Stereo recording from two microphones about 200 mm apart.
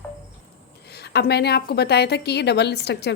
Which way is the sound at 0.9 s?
55° left (ahead or behind).